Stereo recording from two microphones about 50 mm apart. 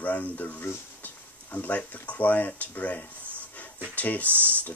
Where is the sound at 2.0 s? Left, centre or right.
Left.